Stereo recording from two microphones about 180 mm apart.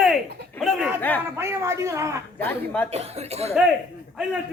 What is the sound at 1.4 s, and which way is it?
Speech, 15° right (ahead or behind).